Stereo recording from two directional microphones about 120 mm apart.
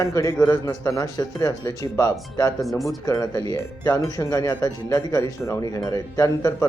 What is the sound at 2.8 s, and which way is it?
Speech, 30° left (ahead or behind).